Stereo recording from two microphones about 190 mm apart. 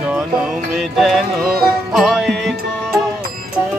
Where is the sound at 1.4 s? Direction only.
55° right (ahead or behind).